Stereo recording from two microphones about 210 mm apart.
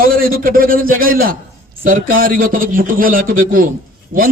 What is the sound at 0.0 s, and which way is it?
A man's voice, 45° right (ahead or behind).